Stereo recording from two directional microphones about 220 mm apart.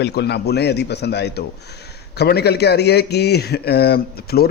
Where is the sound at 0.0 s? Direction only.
50° left (ahead or behind).